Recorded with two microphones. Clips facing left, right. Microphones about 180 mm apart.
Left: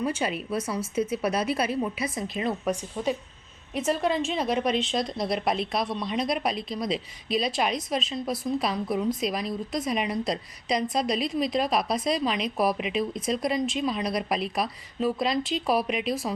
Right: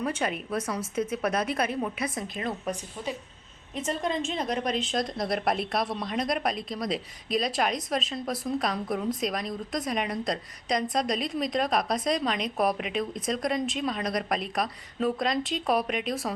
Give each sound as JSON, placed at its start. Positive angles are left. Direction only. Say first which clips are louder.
{"t": 0.0, "sound": "speech", "louder": "left 2 dB", "side_deg": 5}
{"t": 2.3, "sound": "a woman's voice", "louder": "left 4 dB", "side_deg": 15}